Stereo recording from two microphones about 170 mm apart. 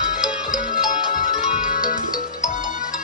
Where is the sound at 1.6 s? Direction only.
55° left (ahead or behind).